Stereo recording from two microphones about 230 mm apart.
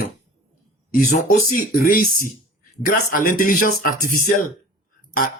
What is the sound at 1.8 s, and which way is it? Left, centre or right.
Speech, left.